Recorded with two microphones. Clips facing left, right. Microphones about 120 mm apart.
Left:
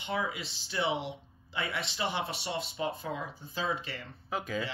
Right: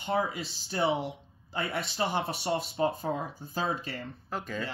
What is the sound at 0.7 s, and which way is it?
Speech, 45° right (ahead or behind).